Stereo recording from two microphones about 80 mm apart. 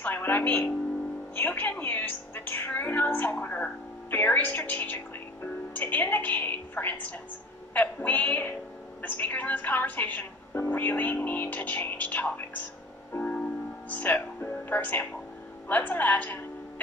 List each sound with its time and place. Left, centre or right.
0.0 s a woman's voice: left
13.8 s a woman's voice: left